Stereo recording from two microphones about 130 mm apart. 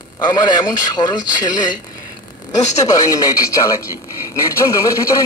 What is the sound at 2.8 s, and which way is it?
Speech, 25° left (ahead or behind).